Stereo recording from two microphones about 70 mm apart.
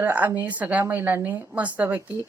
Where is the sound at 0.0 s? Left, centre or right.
Right.